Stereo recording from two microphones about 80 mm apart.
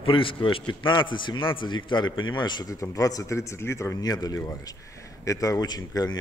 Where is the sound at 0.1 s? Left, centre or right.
Left.